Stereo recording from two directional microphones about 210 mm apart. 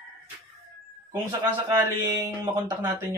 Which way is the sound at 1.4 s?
15° right (ahead or behind).